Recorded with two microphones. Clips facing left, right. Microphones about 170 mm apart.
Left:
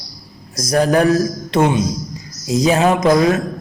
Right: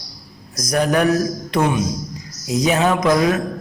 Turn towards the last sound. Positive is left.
turn(degrees=25)  # may be behind; listen again after turning